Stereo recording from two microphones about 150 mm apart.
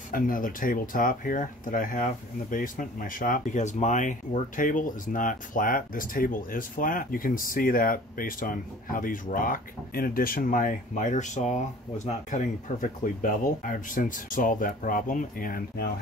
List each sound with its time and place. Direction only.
0.1 s speech: 65° left (ahead or behind)